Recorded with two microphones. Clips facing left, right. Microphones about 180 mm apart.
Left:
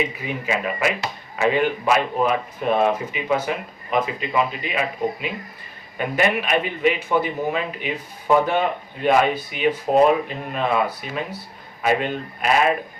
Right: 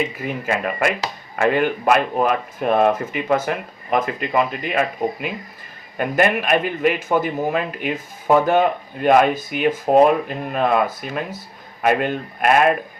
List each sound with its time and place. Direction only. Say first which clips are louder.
0.4 s speech: right 2 dB; 55° right (ahead or behind)